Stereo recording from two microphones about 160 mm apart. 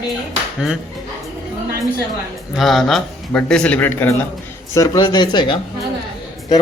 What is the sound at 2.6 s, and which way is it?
A man's voice, centre (ahead or behind).